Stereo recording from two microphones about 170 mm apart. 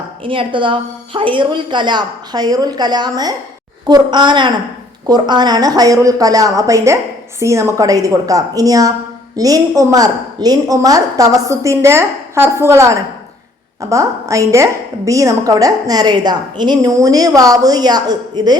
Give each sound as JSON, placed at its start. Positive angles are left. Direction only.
{"t": 0.3, "sound": "a woman's voice", "side_deg": -30}